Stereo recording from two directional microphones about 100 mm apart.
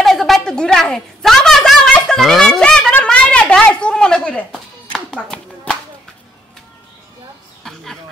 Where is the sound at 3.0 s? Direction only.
10° left (ahead or behind).